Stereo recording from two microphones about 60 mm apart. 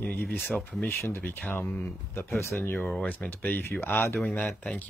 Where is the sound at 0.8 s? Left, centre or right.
Left.